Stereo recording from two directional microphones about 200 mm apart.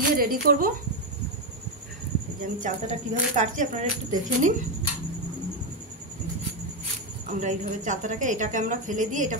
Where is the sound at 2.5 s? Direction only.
40° right (ahead or behind).